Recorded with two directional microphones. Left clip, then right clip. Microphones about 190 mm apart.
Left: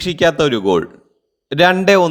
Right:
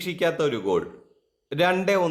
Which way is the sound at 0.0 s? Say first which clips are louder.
Left 10 dB; 30° left (ahead or behind).